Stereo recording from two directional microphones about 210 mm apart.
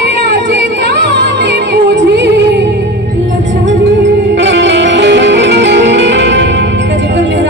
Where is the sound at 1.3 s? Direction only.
55° right (ahead or behind).